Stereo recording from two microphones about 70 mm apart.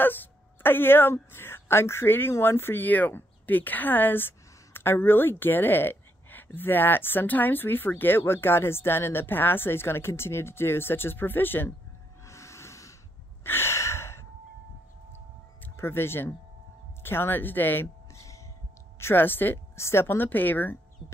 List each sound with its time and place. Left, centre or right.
0.0 s a woman's voice: left
12.3 s snort: left
13.4 s gasp: left
15.7 s speech: left
18.1 s a sound: left
18.9 s a woman's voice: left